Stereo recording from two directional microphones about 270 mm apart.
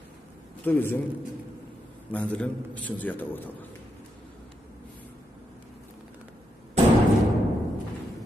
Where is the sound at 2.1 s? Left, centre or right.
Centre.